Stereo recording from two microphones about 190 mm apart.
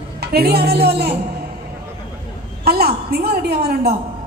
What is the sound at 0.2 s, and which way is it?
Speech, 55° right (ahead or behind).